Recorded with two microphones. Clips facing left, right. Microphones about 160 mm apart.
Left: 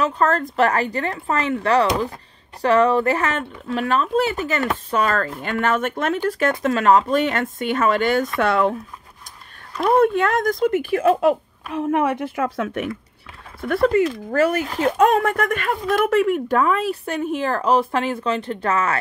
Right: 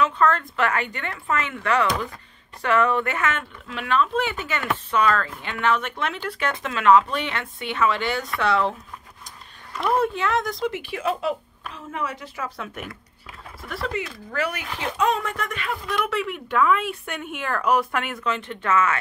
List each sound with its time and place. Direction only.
0.0 s speech: 40° left (ahead or behind)
9.8 s speech: 50° left (ahead or behind)